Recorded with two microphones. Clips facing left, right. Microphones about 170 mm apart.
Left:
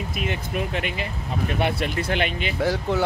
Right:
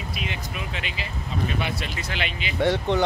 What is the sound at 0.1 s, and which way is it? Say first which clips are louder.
Speech: left 5 dB; 50° left (ahead or behind).